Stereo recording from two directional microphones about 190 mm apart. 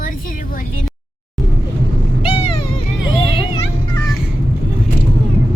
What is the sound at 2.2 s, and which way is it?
Vehicle, 30° left (ahead or behind).